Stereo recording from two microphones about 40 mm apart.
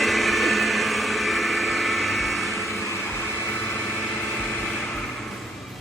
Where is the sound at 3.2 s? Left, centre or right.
Left.